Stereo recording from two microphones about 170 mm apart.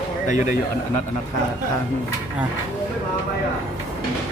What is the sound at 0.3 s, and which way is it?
Speech, 45° left (ahead or behind).